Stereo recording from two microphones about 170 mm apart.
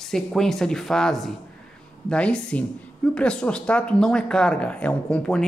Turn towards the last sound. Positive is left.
turn(degrees=5)  # may be behind; listen again after turning